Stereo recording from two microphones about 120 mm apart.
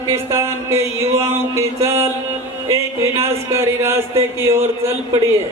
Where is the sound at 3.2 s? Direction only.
20° right (ahead or behind).